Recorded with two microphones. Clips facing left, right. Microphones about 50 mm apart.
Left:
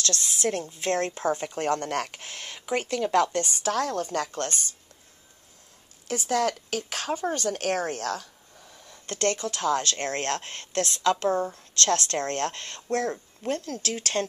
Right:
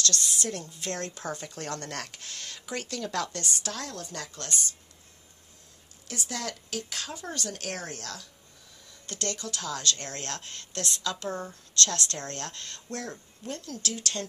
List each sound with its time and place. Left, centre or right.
0.0 s speech: left
3.9 s speech: left
6.0 s a woman's voice: left